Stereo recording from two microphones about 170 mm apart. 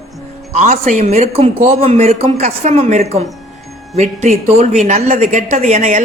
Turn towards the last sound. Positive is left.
turn(degrees=-45)  # may be behind; listen again after turning